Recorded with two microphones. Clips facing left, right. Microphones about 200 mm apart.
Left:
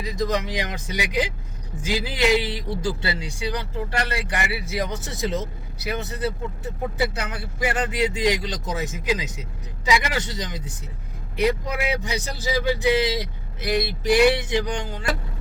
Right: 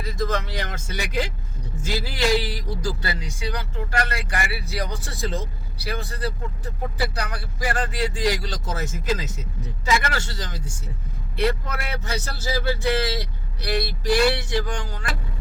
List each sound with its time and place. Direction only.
0.0 s speech: 15° left (ahead or behind)